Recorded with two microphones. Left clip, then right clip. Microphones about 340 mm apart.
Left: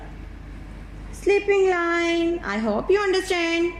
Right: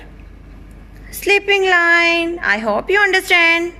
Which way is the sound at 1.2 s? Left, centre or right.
Right.